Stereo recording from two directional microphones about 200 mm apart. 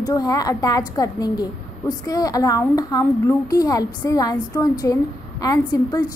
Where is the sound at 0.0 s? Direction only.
20° left (ahead or behind).